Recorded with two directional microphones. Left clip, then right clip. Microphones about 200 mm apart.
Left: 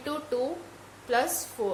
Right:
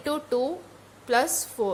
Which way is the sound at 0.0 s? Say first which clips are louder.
Right 4 dB; 40° right (ahead or behind).